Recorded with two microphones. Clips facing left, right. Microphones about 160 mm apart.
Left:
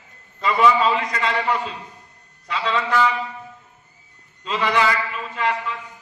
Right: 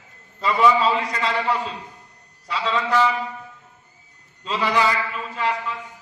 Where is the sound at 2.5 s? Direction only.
30° right (ahead or behind).